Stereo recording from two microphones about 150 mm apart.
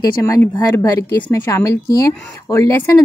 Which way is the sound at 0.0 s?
25° left (ahead or behind).